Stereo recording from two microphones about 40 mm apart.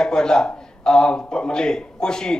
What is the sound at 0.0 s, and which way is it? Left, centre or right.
A man's voice, centre.